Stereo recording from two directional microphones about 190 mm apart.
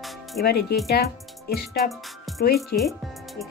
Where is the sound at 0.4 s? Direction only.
55° left (ahead or behind).